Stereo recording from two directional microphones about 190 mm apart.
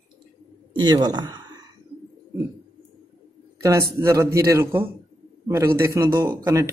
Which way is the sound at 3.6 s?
15° right (ahead or behind).